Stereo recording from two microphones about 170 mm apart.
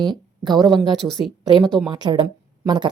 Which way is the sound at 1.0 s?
10° right (ahead or behind).